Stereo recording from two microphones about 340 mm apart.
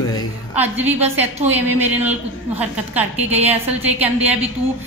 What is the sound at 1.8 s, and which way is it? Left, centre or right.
A woman's voice, centre.